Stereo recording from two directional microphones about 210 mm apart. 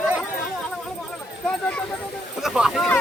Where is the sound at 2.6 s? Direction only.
Centre (ahead or behind).